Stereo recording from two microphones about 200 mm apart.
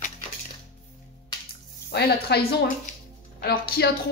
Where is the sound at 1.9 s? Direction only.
55° left (ahead or behind).